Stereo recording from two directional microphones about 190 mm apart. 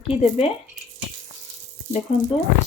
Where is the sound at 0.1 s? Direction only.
30° left (ahead or behind).